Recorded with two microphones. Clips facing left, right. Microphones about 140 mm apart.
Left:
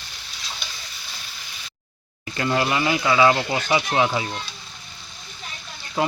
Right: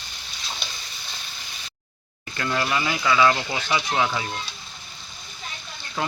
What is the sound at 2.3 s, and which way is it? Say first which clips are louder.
Speech: left 3 dB; 25° left (ahead or behind).